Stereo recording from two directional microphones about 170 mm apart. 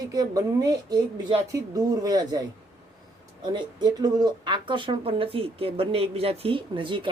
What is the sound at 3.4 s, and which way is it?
Speech, 25° right (ahead or behind).